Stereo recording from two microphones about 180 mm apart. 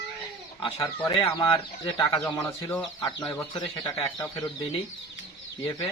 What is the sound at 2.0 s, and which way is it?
Speech, 20° left (ahead or behind).